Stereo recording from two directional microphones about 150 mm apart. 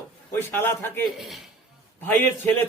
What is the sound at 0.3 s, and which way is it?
Speech, 15° left (ahead or behind).